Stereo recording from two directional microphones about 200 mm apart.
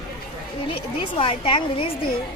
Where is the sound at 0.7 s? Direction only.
30° left (ahead or behind).